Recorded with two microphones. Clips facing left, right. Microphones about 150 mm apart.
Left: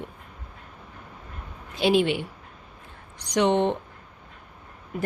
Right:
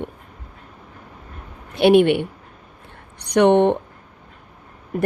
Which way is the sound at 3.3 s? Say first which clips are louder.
Right 7 dB; 60° right (ahead or behind).